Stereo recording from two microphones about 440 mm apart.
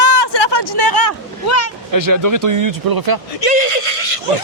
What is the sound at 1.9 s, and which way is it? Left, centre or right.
Speech, right.